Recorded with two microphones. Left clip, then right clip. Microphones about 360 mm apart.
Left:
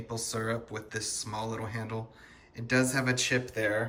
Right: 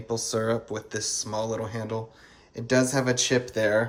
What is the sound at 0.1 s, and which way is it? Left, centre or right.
Speech, centre.